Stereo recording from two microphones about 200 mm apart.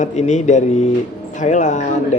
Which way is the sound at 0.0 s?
35° left (ahead or behind).